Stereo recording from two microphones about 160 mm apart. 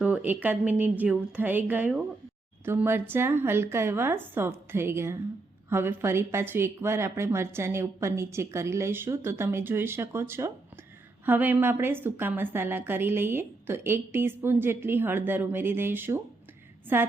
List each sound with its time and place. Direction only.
0.0 s a woman's voice: 10° right (ahead or behind)